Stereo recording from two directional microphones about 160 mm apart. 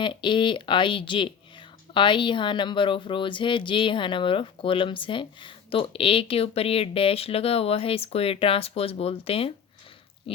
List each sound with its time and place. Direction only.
0.0 s speech: 30° left (ahead or behind)
10.3 s pig: 35° left (ahead or behind)